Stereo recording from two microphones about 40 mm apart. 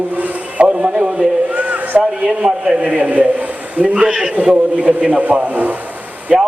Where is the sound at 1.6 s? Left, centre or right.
Right.